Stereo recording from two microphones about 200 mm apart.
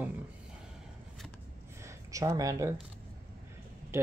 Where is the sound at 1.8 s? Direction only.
15° right (ahead or behind).